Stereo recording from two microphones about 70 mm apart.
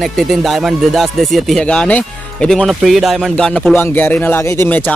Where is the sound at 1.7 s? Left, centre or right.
Centre.